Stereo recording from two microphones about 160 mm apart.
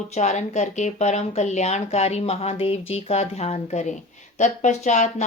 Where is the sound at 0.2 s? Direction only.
45° left (ahead or behind).